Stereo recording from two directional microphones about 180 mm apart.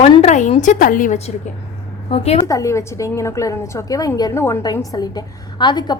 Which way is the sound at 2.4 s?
15° left (ahead or behind).